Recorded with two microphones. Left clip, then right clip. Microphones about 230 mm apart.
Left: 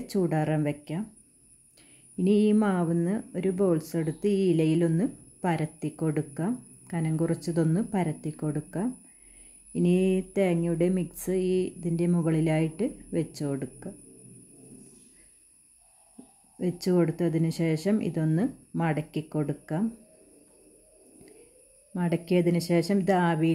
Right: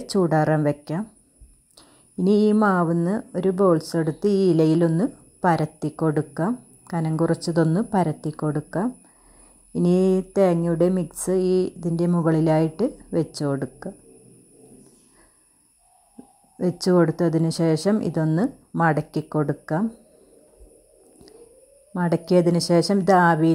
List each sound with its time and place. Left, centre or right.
0.0 s a woman's voice: centre
3.5 s a woman's voice: centre
9.7 s a woman's voice: centre
16.5 s a woman's voice: centre
21.9 s a woman's voice: centre